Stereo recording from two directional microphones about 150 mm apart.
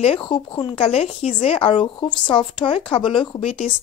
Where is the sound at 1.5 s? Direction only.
35° left (ahead or behind).